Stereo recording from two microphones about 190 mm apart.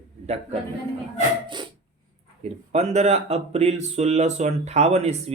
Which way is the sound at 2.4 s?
35° right (ahead or behind).